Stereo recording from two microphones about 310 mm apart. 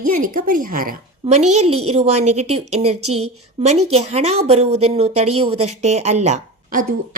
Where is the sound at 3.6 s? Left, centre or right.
Centre.